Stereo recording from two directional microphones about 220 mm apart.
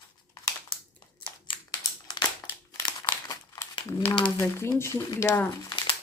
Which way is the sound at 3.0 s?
20° left (ahead or behind).